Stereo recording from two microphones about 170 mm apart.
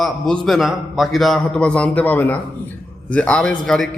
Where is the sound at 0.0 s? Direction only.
Centre (ahead or behind).